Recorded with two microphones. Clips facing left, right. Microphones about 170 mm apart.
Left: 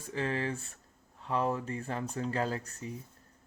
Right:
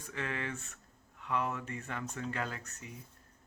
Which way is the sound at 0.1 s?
30° left (ahead or behind).